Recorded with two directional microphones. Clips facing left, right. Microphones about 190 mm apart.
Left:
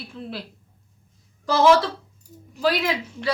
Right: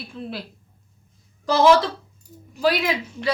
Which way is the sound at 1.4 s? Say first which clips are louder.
Right 1 dB; 15° right (ahead or behind).